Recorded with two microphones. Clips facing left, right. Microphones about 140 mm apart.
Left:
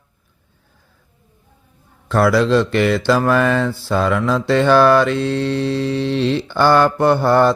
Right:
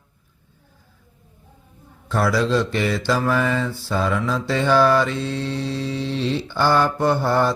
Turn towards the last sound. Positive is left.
turn(degrees=70)  # may be behind; listen again after turning